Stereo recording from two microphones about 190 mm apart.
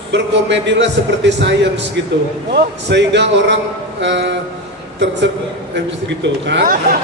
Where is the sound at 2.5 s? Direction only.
65° right (ahead or behind).